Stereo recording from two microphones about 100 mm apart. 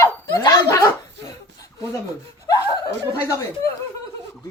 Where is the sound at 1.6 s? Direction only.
30° left (ahead or behind).